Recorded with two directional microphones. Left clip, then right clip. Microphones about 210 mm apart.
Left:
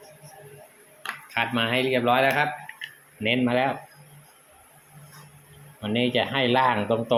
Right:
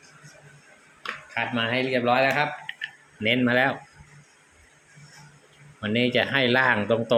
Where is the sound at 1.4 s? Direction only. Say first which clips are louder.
Left 2 dB; 10° left (ahead or behind).